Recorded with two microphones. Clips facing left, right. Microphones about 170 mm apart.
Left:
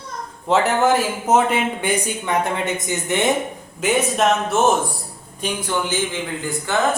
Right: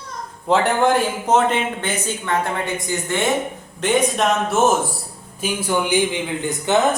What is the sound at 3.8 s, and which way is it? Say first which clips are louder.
Speech: even; centre (ahead or behind).